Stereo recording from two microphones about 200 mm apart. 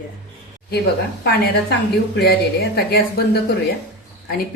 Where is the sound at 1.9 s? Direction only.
50° left (ahead or behind).